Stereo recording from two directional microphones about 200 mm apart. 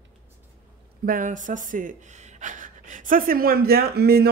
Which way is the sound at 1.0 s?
40° right (ahead or behind).